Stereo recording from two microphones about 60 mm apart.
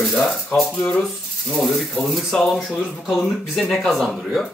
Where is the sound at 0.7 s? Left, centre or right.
Centre.